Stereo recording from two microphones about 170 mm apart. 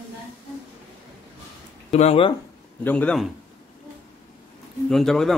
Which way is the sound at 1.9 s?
40° left (ahead or behind).